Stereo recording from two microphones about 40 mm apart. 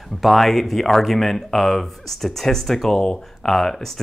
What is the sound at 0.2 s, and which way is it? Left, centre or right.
Speech, centre.